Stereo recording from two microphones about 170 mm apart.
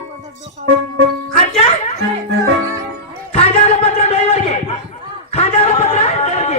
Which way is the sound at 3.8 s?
35° left (ahead or behind).